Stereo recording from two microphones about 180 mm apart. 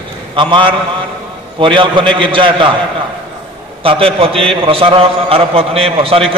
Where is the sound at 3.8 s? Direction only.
30° right (ahead or behind).